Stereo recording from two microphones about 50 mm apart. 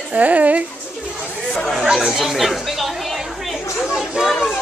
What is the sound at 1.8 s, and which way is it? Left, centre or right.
Speech, centre.